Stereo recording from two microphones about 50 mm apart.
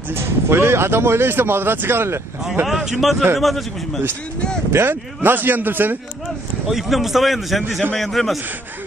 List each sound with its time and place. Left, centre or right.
0.1 s speech: right
2.6 s a man's voice: centre
4.8 s a man's voice: right
6.7 s a man's voice: centre